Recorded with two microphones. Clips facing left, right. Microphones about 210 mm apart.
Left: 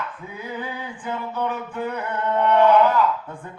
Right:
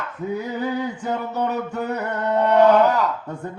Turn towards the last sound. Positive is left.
turn(degrees=-40)  # may be behind; listen again after turning